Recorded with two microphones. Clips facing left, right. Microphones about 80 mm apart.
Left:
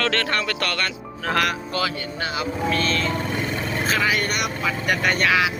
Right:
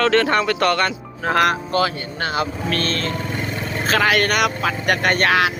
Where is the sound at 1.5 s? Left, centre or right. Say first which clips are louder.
Right 5 dB; right.